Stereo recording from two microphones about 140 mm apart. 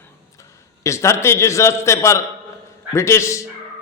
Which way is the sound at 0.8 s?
20° left (ahead or behind).